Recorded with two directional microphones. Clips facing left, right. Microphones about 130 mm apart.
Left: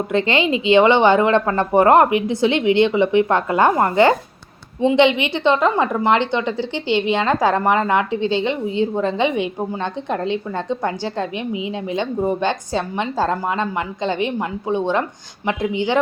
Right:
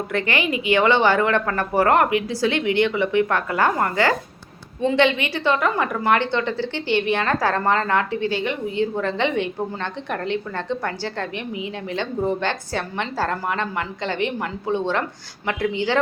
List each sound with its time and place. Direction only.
0.1 s a woman's voice: 20° left (ahead or behind)